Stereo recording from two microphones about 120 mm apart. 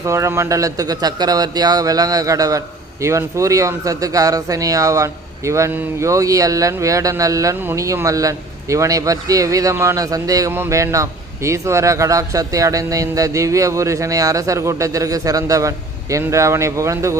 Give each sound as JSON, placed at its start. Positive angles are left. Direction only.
{"t": 0.0, "sound": "speech", "side_deg": -25}